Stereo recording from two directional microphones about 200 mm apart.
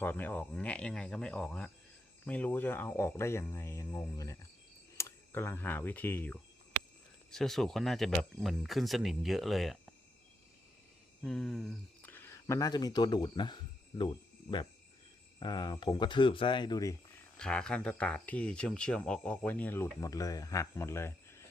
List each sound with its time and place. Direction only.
0.0 s speech: 10° left (ahead or behind)
11.2 s speech: 5° left (ahead or behind); by 14.1 s 20° left (ahead or behind)
15.4 s speech: 20° left (ahead or behind)
17.3 s speech: 5° left (ahead or behind)